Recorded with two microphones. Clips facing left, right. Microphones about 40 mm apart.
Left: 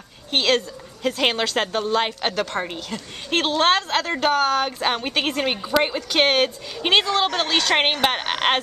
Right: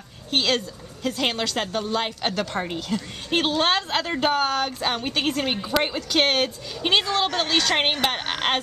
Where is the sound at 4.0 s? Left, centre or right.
Centre.